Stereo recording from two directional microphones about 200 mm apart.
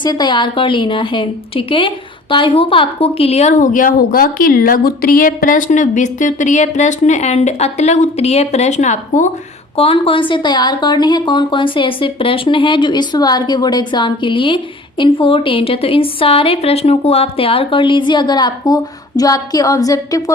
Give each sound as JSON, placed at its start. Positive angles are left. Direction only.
{"t": 0.0, "sound": "a woman's voice", "side_deg": 20}